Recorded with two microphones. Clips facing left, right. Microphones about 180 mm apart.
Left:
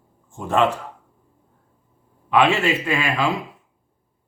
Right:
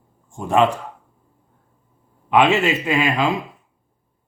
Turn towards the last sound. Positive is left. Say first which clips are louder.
# right 3 dB
turn(degrees=-20)  # may be behind; listen again after turning